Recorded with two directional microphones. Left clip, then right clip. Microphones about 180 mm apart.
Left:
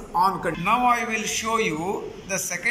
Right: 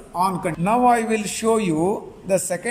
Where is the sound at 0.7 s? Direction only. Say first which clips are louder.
Right 3 dB; 55° right (ahead or behind).